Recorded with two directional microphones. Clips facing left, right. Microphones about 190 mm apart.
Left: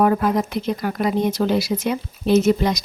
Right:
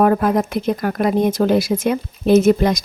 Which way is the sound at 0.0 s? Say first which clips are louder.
Right 3 dB; 55° right (ahead or behind).